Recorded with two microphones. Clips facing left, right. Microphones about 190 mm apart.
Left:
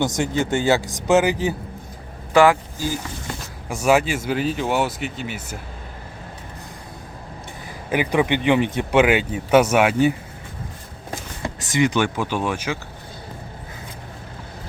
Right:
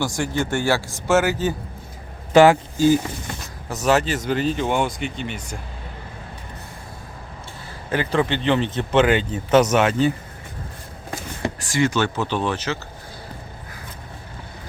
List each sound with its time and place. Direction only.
0.0 s speech: 20° left (ahead or behind)
2.3 s speech: 25° right (ahead or behind)
3.7 s speech: 10° left (ahead or behind)
7.9 s speech: 15° left (ahead or behind)
11.6 s speech: 20° left (ahead or behind)